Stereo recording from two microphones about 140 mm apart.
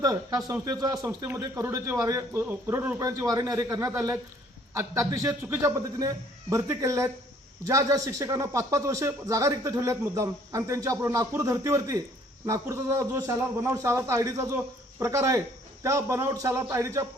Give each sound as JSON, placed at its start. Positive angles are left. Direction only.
{"t": 0.0, "sound": "speech", "side_deg": -25}